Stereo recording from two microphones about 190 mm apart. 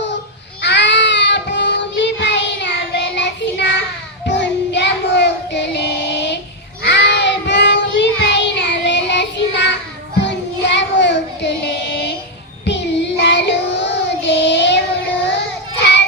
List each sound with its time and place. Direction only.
0.6 s child singing: 65° left (ahead or behind)